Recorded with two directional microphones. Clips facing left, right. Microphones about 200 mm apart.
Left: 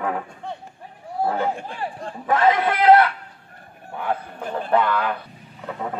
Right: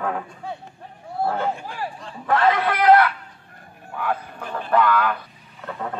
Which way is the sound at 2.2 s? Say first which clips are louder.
Left 1 dB; 15° left (ahead or behind).